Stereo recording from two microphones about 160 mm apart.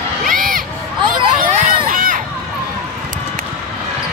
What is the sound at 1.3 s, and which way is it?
Crowd, 50° right (ahead or behind).